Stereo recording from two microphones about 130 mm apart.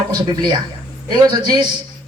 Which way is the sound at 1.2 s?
35° right (ahead or behind).